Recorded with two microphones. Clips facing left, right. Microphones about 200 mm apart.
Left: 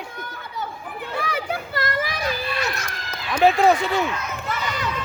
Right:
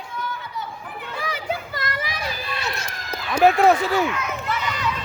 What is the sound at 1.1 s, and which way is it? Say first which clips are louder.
Children playing: left 1 dB; 60° left (ahead or behind).